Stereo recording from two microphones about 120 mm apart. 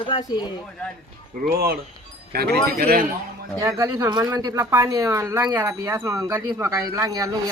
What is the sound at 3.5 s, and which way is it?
Speech, 30° right (ahead or behind).